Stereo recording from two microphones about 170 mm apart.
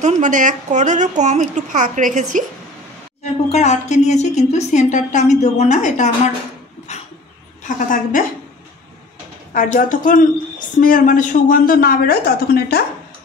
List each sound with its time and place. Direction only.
0.0 s speech: 45° right (ahead or behind)
3.5 s a woman's voice: 40° left (ahead or behind)
7.6 s a woman's voice: 50° left (ahead or behind)
9.5 s a woman's voice: 50° left (ahead or behind)